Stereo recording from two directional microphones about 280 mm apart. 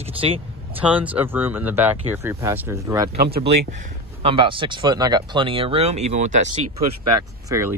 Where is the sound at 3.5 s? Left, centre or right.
Right.